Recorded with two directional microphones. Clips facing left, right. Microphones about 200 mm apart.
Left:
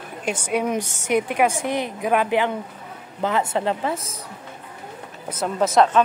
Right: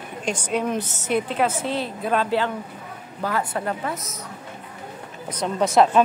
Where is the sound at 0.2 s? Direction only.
10° left (ahead or behind); by 4.1 s 30° left (ahead or behind).